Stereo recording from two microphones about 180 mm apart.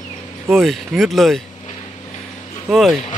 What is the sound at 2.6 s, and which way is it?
Speech, centre (ahead or behind).